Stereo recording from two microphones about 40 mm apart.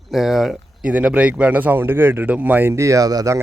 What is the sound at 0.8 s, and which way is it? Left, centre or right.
Speech, right.